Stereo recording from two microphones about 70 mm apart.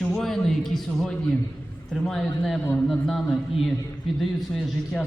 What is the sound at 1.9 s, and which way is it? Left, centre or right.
Speech, centre.